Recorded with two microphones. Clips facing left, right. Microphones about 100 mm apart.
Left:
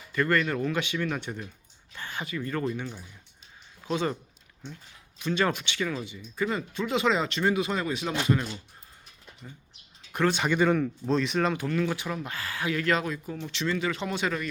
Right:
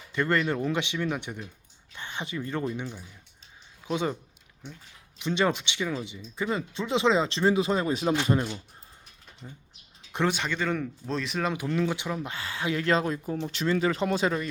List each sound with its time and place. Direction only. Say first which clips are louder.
0.1 s speech: even; 20° right (ahead or behind)
5.2 s speech: right 1 dB; 20° right (ahead or behind)
10.1 s speech: left 1 dB; 20° right (ahead or behind)
10.4 s speech: left 5 dB; 10° left (ahead or behind)
11.5 s speech: even; 15° right (ahead or behind)